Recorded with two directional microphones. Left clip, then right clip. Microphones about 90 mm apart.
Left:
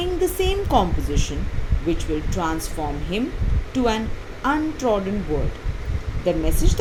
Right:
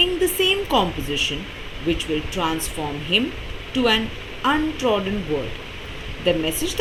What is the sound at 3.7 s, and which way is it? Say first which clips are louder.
A woman's voice: right 3 dB; 30° left (ahead or behind).